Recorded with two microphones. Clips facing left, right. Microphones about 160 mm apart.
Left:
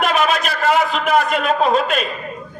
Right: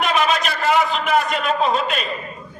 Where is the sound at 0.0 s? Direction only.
45° left (ahead or behind).